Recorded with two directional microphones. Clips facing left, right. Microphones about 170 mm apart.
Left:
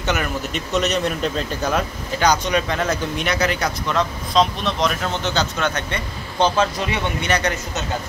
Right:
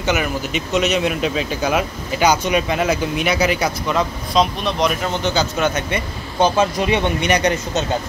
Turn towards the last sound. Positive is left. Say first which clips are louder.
# right 4 dB
turn(degrees=-15)  # may be behind; listen again after turning